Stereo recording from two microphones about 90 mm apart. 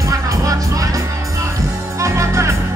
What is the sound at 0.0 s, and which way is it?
Music, 40° right (ahead or behind).